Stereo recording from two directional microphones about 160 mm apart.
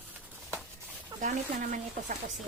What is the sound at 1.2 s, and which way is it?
Speech, 50° right (ahead or behind).